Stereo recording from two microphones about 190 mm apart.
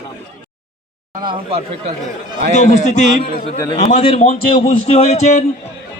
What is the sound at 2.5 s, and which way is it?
A man's voice, 40° left (ahead or behind).